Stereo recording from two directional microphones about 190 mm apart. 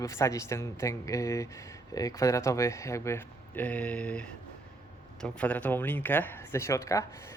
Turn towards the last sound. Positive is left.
turn(degrees=15)  # may be behind; listen again after turning